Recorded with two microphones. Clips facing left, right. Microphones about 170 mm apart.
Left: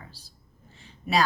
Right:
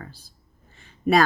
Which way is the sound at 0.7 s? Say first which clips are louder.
Right 6 dB; 55° right (ahead or behind).